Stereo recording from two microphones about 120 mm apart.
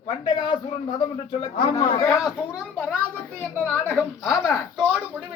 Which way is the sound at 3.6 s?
10° left (ahead or behind).